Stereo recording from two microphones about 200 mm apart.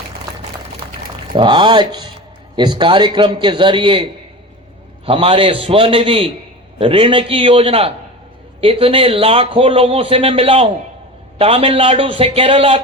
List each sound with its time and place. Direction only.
1.3 s a man's voice: 25° right (ahead or behind)
5.0 s a man's voice: 25° right (ahead or behind)